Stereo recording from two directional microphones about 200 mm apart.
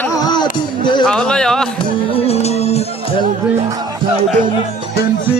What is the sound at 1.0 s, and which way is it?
Speech, 5° left (ahead or behind).